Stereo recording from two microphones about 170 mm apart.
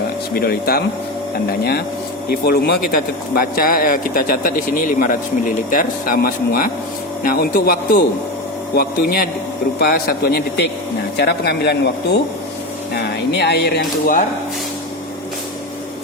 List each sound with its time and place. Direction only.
0.3 s speech: 65° left (ahead or behind)
2.3 s speech: 65° left (ahead or behind)
13.3 s speech: 75° left (ahead or behind)